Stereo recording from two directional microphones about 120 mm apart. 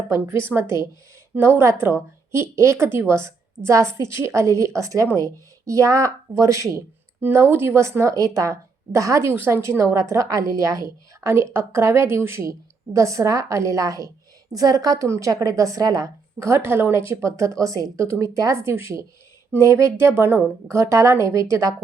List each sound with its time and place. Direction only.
0.1 s a woman's voice: 20° right (ahead or behind)